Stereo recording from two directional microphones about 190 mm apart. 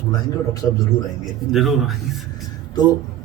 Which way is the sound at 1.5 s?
Centre (ahead or behind).